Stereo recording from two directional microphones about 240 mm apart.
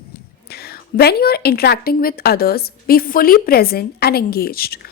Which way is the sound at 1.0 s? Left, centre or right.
Left.